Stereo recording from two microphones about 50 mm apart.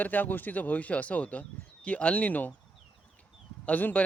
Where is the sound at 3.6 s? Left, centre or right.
Left.